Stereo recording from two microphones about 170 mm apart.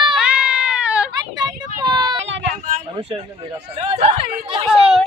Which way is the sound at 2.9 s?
30° right (ahead or behind).